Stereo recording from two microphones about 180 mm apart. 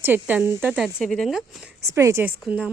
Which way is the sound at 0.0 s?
10° right (ahead or behind).